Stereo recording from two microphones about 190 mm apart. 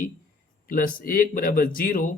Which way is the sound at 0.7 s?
45° left (ahead or behind).